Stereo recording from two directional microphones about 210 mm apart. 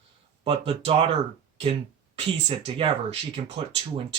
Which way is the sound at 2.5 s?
30° right (ahead or behind).